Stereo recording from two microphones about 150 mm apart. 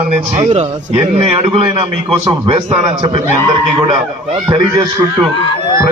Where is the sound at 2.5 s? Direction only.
40° right (ahead or behind).